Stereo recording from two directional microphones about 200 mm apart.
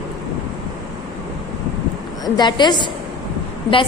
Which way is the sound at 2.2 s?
20° left (ahead or behind).